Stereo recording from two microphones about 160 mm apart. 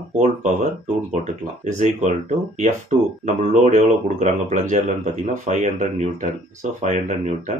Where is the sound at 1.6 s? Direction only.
45° right (ahead or behind).